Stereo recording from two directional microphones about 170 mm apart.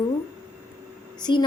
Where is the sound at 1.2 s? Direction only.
25° left (ahead or behind).